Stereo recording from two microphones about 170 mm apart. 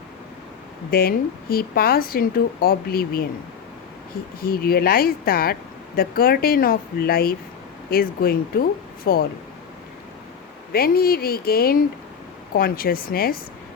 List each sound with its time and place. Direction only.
0.9 s speech: 60° left (ahead or behind)
4.4 s speech: 60° left (ahead or behind)
10.7 s speech: 60° left (ahead or behind)